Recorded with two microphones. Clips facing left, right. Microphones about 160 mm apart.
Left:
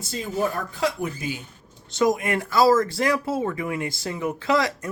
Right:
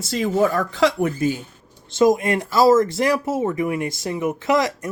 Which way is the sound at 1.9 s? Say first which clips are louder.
Right 5 dB; 25° right (ahead or behind).